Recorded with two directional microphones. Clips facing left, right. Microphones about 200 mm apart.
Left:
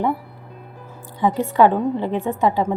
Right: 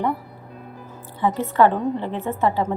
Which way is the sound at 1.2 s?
15° left (ahead or behind).